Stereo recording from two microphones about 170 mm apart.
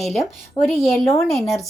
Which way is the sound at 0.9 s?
15° left (ahead or behind).